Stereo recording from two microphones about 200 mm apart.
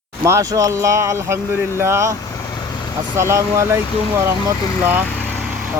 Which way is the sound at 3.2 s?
15° right (ahead or behind).